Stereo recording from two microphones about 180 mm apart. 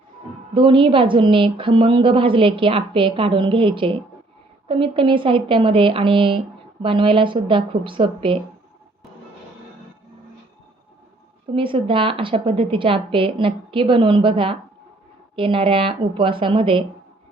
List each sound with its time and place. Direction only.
0.5 s a woman's voice: 30° right (ahead or behind)
11.5 s a woman's voice: 30° right (ahead or behind)